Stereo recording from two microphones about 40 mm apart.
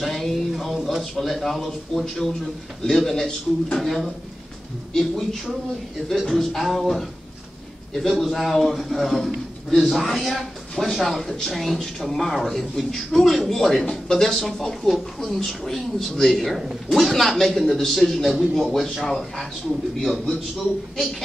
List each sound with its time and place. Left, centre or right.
0.0 s a sound: centre
1.1 s speech: centre
13.8 s speech: centre
20.9 s speech: centre